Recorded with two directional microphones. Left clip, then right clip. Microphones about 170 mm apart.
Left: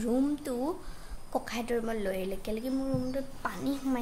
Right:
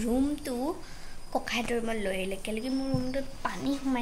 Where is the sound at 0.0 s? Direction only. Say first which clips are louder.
Even; 5° left (ahead or behind).